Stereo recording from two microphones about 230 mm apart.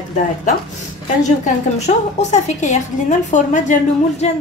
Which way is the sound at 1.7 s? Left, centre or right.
Left.